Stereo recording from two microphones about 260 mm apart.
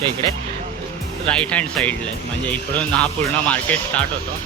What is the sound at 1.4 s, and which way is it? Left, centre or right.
Speech, centre.